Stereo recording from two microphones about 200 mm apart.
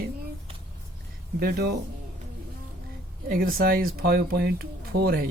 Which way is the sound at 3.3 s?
45° right (ahead or behind).